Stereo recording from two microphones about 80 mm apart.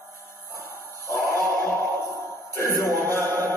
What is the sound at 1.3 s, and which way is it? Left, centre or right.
Music, right.